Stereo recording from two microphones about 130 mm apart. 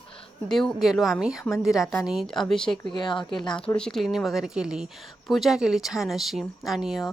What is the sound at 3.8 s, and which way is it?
Speech, 5° left (ahead or behind).